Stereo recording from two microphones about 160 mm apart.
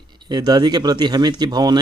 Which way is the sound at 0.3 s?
25° right (ahead or behind).